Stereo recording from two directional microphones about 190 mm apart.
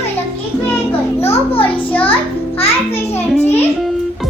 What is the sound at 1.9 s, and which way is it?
Speech, 10° left (ahead or behind).